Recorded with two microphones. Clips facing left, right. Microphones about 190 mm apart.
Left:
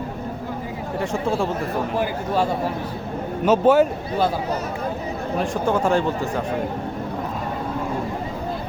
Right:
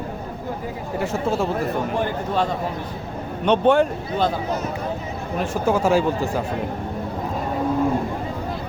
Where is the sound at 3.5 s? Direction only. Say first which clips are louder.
Left 1 dB; 5° left (ahead or behind).